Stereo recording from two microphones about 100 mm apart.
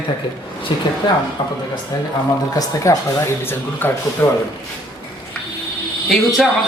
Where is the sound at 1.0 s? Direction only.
50° left (ahead or behind).